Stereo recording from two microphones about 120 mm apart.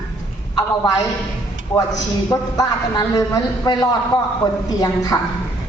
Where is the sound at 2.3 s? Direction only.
30° left (ahead or behind).